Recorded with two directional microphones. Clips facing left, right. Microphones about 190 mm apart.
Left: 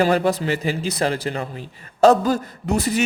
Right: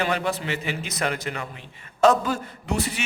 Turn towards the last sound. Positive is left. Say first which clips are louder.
# left 6 dB
turn(degrees=40)  # may be behind; listen again after turning